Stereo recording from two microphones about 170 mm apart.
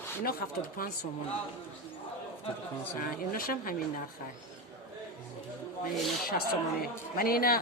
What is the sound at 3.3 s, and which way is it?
Speech, 60° left (ahead or behind).